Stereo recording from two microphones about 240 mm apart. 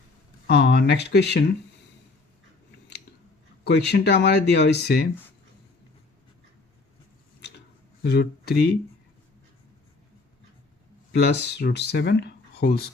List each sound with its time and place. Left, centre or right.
0.4 s speech: left
3.6 s speech: left
8.0 s speech: left
11.1 s speech: left